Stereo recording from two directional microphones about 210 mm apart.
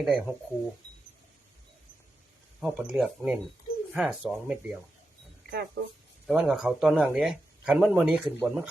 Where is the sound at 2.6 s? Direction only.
5° right (ahead or behind).